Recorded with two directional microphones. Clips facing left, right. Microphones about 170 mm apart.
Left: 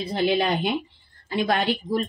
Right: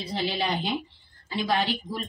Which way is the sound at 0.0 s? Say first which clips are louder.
Left 6 dB; 55° left (ahead or behind).